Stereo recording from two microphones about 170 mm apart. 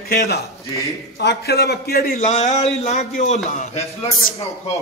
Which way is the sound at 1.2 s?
80° left.